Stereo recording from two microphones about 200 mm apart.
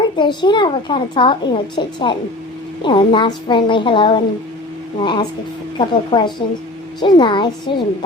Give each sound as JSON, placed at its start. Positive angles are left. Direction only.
{"t": 0.2, "sound": "a woman's voice", "side_deg": 25}